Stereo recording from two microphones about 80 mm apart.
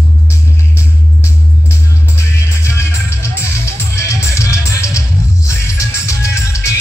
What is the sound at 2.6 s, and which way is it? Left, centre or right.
Music, left.